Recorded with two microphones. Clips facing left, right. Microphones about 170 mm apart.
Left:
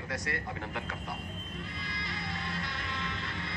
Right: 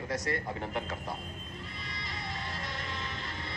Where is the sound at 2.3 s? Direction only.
40° right (ahead or behind).